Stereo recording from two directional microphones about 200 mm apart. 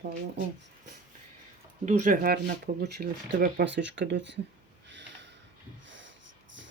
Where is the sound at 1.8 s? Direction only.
40° right (ahead or behind); by 4.4 s 60° right (ahead or behind).